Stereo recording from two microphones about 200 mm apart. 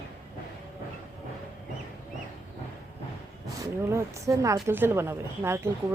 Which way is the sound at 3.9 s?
15° right (ahead or behind).